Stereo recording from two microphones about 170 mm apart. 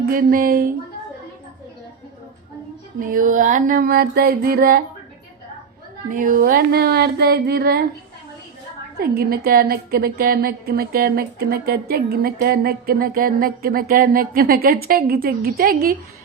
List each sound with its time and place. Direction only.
0.0 s a woman's voice: 60° right (ahead or behind)
3.0 s a woman's voice: 55° right (ahead or behind)
6.1 s a woman's voice: 55° right (ahead or behind)
9.0 s a woman's voice: 65° right (ahead or behind)